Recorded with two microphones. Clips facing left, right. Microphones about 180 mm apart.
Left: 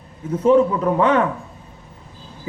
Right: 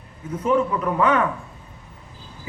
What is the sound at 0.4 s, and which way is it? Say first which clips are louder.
Speech: left 6 dB; 30° left (ahead or behind).